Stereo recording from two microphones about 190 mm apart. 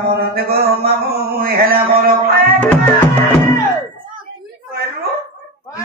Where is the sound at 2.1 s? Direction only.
55° right (ahead or behind).